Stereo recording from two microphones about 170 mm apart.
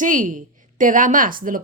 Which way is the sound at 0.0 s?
50° right (ahead or behind).